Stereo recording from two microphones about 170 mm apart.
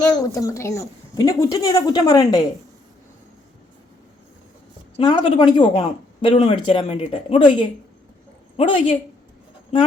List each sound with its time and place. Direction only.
0.1 s a woman's voice: 20° left (ahead or behind)
4.9 s a woman's voice: 30° left (ahead or behind)